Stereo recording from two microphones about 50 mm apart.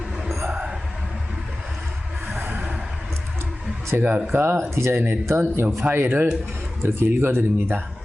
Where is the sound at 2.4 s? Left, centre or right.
Right.